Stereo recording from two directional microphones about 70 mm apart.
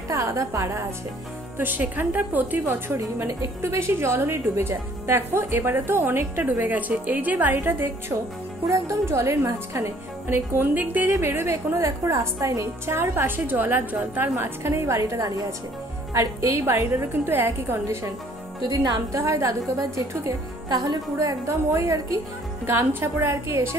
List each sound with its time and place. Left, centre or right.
0.1 s a woman's voice: right
1.6 s a woman's voice: right
8.6 s speech: right
11.1 s speech: right
14.3 s a woman's voice: right
18.7 s a woman's voice: right
21.5 s a woman's voice: right
22.7 s speech: right